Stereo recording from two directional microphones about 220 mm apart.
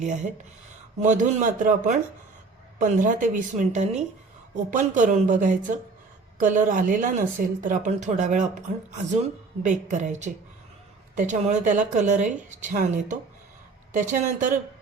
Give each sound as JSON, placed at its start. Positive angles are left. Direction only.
{"t": 0.0, "sound": "speech", "side_deg": -35}
{"t": 9.6, "sound": "speech", "side_deg": -35}